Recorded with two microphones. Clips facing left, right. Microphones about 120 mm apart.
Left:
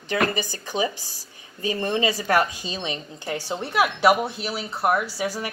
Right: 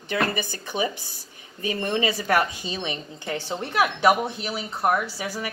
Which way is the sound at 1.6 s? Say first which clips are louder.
Left 1 dB; 30° left (ahead or behind).